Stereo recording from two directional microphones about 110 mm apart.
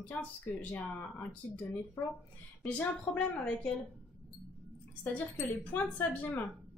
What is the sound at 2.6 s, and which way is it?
Speech, 10° left (ahead or behind).